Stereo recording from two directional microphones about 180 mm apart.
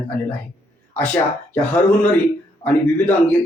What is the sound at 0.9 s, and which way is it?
Speech, 10° left (ahead or behind).